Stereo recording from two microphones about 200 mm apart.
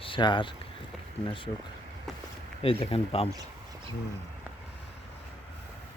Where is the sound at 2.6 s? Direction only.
30° left (ahead or behind).